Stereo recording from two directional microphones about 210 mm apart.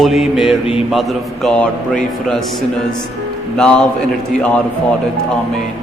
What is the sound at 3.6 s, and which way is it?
Speech, 5° left (ahead or behind).